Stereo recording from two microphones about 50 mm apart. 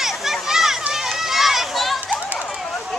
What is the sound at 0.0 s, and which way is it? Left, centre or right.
Children playing, centre.